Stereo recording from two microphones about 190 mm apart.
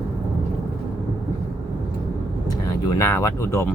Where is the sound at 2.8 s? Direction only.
15° left (ahead or behind).